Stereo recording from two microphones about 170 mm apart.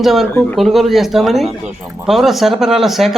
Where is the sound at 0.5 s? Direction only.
Centre (ahead or behind).